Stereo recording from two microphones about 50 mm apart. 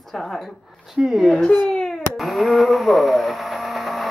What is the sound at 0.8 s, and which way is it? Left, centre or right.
Speech, centre.